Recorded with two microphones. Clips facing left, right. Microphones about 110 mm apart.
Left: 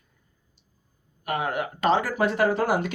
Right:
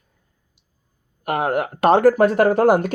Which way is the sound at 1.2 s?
55° right (ahead or behind).